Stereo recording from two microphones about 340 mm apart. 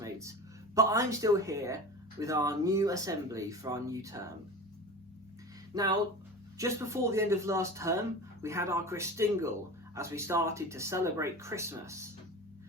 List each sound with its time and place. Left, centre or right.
0.0 s a sound: centre
0.8 s speech: centre
5.7 s speech: centre